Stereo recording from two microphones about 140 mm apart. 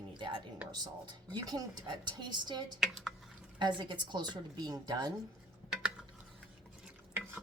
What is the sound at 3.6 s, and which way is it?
A woman's voice, 35° right (ahead or behind).